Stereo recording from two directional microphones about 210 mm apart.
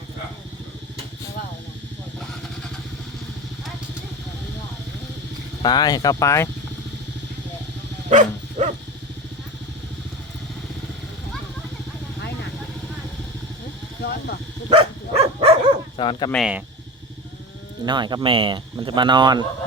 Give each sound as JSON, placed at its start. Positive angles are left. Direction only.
{"t": 5.6, "sound": "speech", "side_deg": 20}
{"t": 8.1, "sound": "dog", "side_deg": -35}
{"t": 14.7, "sound": "a sound", "side_deg": -30}
{"t": 16.0, "sound": "speech", "side_deg": 25}
{"t": 16.3, "sound": "speech", "side_deg": -5}
{"t": 17.8, "sound": "speech", "side_deg": -20}